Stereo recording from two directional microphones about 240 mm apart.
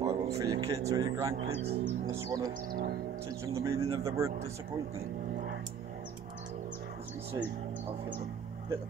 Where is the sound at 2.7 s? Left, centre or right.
Right.